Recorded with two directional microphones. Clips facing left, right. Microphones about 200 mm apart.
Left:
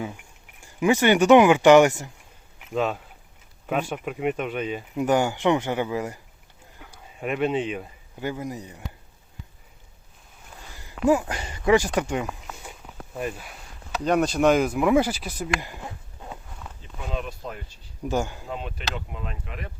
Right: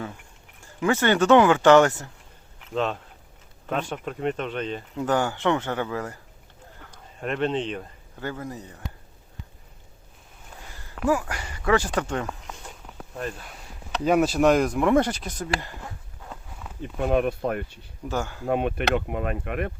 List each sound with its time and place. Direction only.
0.6 s speech: 15° left (ahead or behind)
11.0 s speech: 20° left (ahead or behind)
15.6 s a sound: 15° left (ahead or behind)
16.8 s speech: 60° right (ahead or behind)
18.0 s speech: 15° left (ahead or behind)
18.4 s speech: 60° right (ahead or behind)